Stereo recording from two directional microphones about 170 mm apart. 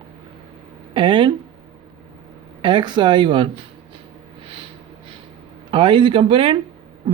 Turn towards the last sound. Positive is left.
turn(degrees=-30)  # may be behind; listen again after turning